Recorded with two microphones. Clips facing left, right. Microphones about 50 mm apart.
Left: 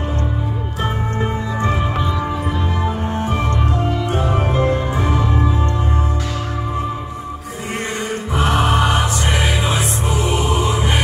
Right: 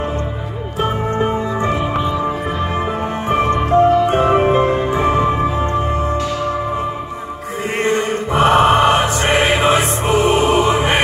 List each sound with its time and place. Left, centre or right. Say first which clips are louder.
2.7 s music: right 2 dB; right
7.8 s music: right 9 dB; right